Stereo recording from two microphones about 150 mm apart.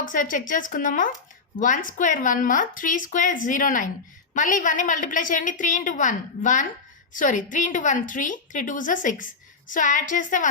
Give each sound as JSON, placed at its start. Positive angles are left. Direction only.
{"t": 0.0, "sound": "a woman's voice", "side_deg": 65}